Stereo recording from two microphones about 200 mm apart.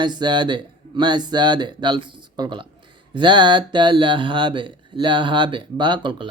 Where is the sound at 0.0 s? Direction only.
20° right (ahead or behind).